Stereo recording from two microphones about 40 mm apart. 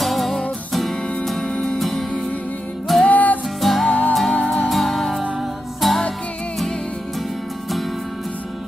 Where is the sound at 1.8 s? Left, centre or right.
Centre.